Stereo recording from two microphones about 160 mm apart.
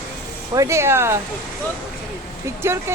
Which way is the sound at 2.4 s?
15° right (ahead or behind).